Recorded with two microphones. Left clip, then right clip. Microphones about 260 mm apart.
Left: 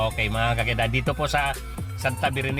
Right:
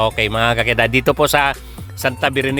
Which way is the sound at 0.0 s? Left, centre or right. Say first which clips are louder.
Right 8 dB; right.